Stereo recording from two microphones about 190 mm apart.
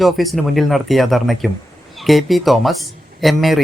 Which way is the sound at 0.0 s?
Centre (ahead or behind).